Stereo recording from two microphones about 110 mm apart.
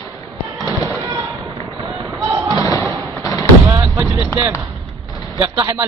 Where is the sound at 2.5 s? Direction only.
35° left (ahead or behind).